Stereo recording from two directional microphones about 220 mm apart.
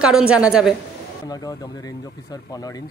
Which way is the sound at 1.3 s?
15° left (ahead or behind).